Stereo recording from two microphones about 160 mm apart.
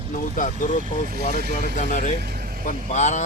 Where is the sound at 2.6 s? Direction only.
50° left (ahead or behind).